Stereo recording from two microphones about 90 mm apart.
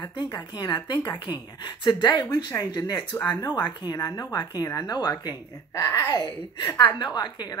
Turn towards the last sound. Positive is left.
turn(degrees=50)  # may be behind; listen again after turning